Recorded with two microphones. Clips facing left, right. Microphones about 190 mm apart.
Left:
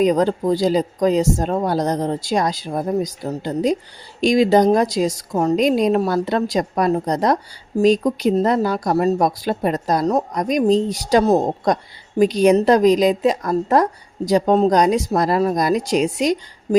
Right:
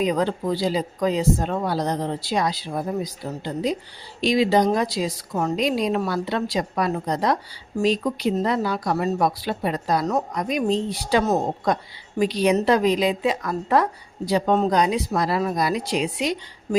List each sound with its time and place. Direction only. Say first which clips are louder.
0.0 s speech: left 6 dB; 45° left (ahead or behind)